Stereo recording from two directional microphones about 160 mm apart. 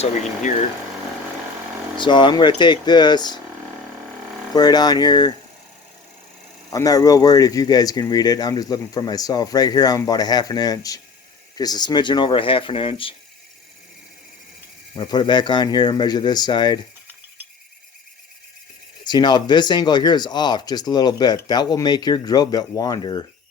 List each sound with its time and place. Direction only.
2.0 s speech: 30° left (ahead or behind)
4.5 s speech: 25° left (ahead or behind)
6.7 s speech: 20° left (ahead or behind)
14.9 s speech: 25° left (ahead or behind)
19.0 s speech: 25° left (ahead or behind)